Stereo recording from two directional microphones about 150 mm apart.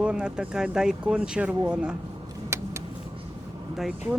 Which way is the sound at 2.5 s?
20° right (ahead or behind).